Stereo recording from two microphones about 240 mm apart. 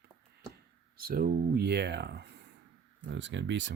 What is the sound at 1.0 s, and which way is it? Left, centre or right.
Speech, right.